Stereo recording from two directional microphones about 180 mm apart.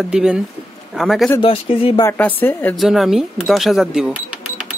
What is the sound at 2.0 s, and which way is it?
Speech, 10° left (ahead or behind).